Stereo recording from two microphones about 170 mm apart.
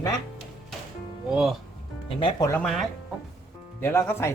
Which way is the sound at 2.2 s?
30° left (ahead or behind).